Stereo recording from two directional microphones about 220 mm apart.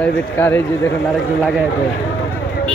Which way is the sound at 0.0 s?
10° left (ahead or behind).